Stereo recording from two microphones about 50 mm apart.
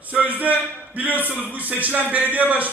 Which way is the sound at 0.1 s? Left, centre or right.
Right.